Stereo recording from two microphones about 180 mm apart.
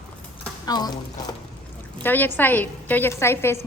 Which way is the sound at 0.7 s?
20° left (ahead or behind).